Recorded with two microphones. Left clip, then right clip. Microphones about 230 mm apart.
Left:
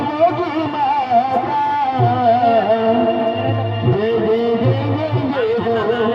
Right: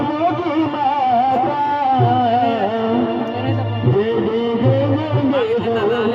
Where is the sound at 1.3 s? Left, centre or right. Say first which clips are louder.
Even; left.